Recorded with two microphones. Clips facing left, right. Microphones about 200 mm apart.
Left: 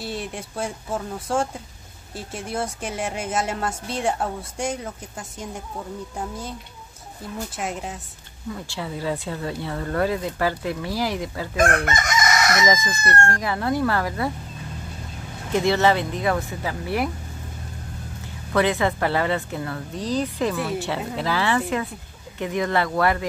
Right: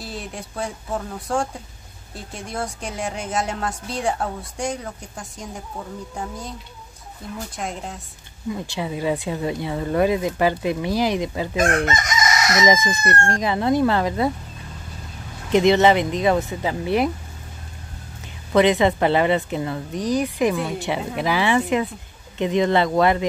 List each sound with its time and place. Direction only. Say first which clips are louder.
0.0 s a woman's voice: left 2 dB; centre (ahead or behind)
7.5 s a woman's voice: even; 5° left (ahead or behind)
8.5 s speech: right 4 dB; 15° right (ahead or behind)
11.8 s chicken: right 1 dB; 55° left (ahead or behind)
12.6 s speech: right 3 dB; 20° right (ahead or behind)
15.5 s speech: right 4 dB; 20° right (ahead or behind)
18.2 s speech: right 5 dB; 20° right (ahead or behind)